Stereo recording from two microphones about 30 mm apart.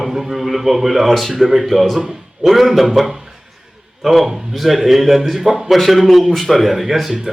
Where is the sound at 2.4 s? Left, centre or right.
Centre.